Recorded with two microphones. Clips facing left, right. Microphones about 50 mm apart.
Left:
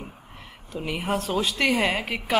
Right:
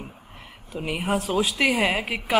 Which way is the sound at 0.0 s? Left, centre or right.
Centre.